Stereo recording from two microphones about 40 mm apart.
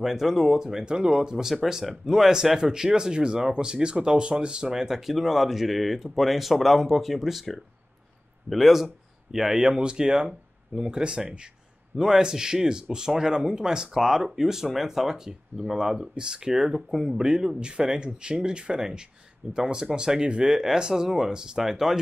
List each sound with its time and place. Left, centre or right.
0.0 s speech: centre